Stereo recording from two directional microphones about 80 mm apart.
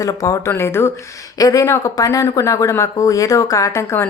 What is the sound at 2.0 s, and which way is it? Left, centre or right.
A woman's voice, left.